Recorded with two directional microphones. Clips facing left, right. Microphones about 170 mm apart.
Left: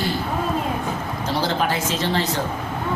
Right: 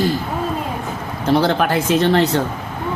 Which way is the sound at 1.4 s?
60° right (ahead or behind).